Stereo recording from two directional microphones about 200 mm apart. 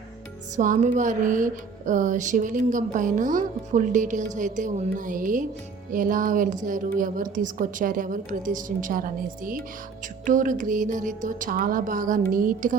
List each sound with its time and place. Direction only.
0.5 s a woman's voice: 40° right (ahead or behind)